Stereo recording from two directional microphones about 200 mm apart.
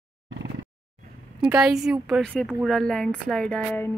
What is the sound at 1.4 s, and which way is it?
A woman's voice, 5° right (ahead or behind).